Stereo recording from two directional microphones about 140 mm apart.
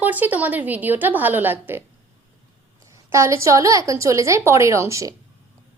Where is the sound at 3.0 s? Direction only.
20° right (ahead or behind).